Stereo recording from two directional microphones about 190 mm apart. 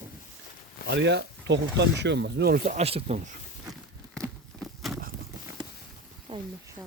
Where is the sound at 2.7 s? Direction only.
35° right (ahead or behind).